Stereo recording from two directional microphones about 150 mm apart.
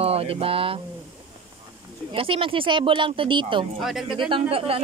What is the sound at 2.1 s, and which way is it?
Speech, 35° right (ahead or behind).